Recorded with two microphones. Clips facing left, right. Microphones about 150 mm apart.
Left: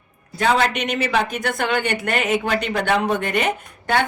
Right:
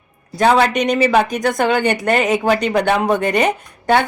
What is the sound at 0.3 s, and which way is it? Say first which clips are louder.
A woman's voice: right 5 dB; 40° right (ahead or behind).